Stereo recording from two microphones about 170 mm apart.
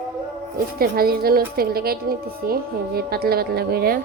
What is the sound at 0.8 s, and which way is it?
Speech, 65° right (ahead or behind).